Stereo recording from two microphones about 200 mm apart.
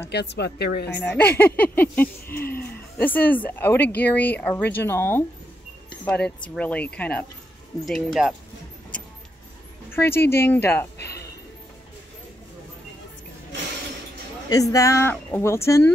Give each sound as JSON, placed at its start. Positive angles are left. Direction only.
{"t": 0.1, "sound": "a woman's voice", "side_deg": 55}
{"t": 1.0, "sound": "a woman's voice", "side_deg": 10}
{"t": 2.2, "sound": "speech", "side_deg": 50}
{"t": 2.6, "sound": "a woman's voice", "side_deg": 10}
{"t": 9.8, "sound": "a woman's voice", "side_deg": 10}
{"t": 11.0, "sound": "a sound", "side_deg": 55}
{"t": 14.5, "sound": "a woman's voice", "side_deg": 15}